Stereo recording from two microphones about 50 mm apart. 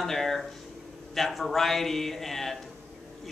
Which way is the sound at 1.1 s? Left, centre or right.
Centre.